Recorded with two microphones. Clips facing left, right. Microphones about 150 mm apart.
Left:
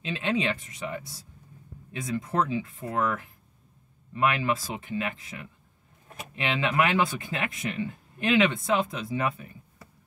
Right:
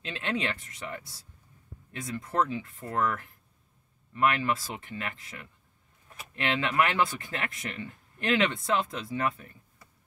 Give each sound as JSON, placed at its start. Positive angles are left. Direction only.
{"t": 0.0, "sound": "speech", "side_deg": 15}
{"t": 6.0, "sound": "a sound", "side_deg": 45}
{"t": 6.3, "sound": "speech", "side_deg": 15}